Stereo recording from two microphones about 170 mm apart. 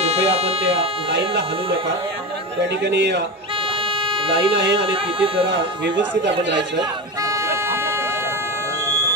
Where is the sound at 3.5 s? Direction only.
30° right (ahead or behind).